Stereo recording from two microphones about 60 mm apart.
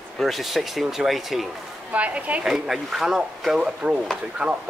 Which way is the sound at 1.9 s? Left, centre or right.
Right.